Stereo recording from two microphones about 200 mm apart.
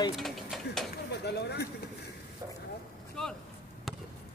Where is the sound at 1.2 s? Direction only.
55° left (ahead or behind).